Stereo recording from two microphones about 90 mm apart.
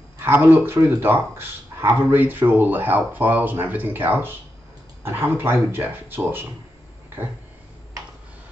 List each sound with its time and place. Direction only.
0.2 s speech: 25° right (ahead or behind)